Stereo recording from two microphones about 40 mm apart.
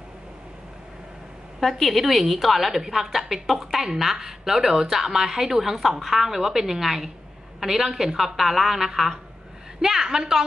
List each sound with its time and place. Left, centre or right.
1.6 s a woman's voice: centre